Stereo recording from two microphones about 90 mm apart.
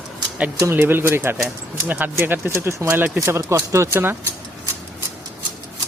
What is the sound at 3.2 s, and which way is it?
Speech, 30° right (ahead or behind).